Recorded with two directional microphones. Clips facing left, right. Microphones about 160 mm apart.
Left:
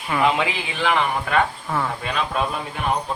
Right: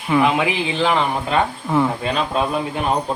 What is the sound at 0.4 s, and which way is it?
Speech, 20° right (ahead or behind).